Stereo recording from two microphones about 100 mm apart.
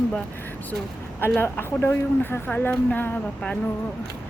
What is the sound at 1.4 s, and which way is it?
Speech, 20° left (ahead or behind).